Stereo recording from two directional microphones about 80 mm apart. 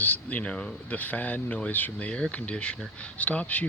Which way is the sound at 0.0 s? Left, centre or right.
Left.